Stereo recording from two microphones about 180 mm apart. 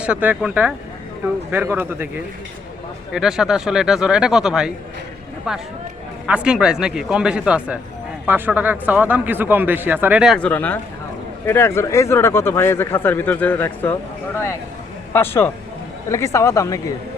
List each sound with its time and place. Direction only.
0.0 s speech: 10° right (ahead or behind); by 13.9 s 10° left (ahead or behind)
15.1 s speech: 10° left (ahead or behind)